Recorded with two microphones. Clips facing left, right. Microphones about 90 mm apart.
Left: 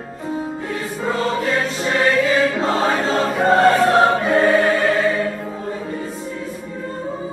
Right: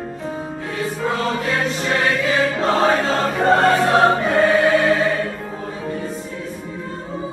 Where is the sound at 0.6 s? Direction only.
Centre (ahead or behind).